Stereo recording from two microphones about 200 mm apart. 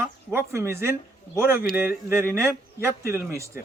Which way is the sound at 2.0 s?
10° right (ahead or behind).